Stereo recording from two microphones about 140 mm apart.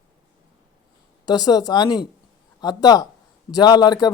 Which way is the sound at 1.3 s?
30° left (ahead or behind).